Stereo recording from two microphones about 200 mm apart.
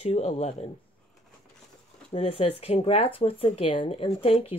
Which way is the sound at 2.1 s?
30° left (ahead or behind).